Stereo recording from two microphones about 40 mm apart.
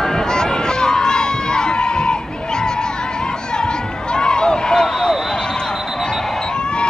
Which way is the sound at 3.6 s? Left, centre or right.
Centre.